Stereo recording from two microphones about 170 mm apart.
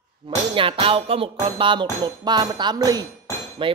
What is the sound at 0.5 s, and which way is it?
Music, 30° right (ahead or behind).